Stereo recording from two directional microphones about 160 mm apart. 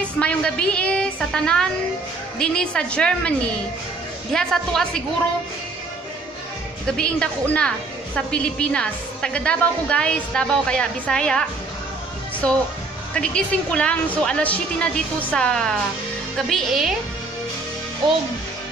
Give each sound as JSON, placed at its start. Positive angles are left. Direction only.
{"t": 0.2, "sound": "a woman's voice", "side_deg": 5}
{"t": 7.0, "sound": "a woman's voice", "side_deg": 5}
{"t": 13.1, "sound": "a woman's voice", "side_deg": 5}